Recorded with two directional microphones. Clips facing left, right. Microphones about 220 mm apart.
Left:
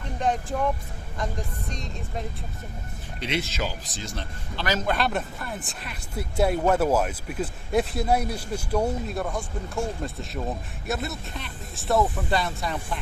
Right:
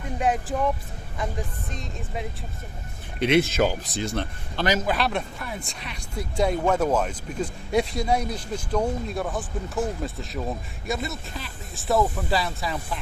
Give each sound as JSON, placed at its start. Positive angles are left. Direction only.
{"t": 0.2, "sound": "speech", "side_deg": -5}
{"t": 1.7, "sound": "speech", "side_deg": -5}
{"t": 3.2, "sound": "a man's voice", "side_deg": -55}
{"t": 4.9, "sound": "speech", "side_deg": 0}